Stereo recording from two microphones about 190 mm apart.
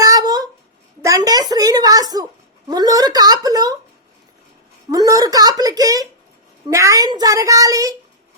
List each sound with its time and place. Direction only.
0.0 s a sound: 20° right (ahead or behind)
2.6 s a woman's voice: 20° right (ahead or behind)
4.9 s a woman's voice: 20° right (ahead or behind)